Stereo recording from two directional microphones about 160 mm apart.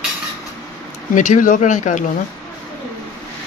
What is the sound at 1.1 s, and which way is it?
Speech, 50° left (ahead or behind).